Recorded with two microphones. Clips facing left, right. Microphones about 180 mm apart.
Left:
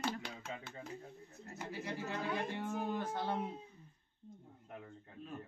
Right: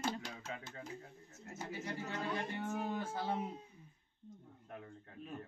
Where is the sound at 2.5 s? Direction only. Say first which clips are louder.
Left 1 dB; 5° right (ahead or behind).